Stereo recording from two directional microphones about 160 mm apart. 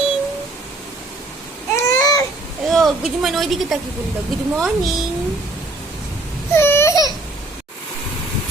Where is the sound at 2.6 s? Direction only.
Centre (ahead or behind).